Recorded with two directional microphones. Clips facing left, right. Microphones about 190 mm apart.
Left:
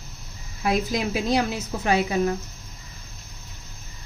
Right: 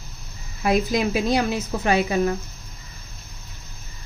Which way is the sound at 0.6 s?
60° right (ahead or behind).